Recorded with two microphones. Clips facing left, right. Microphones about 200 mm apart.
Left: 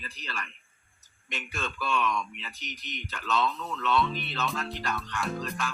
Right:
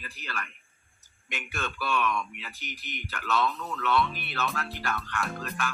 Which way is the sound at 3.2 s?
20° left (ahead or behind).